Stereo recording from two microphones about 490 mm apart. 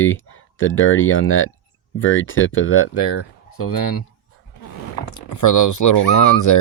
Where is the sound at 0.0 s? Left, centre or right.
Left.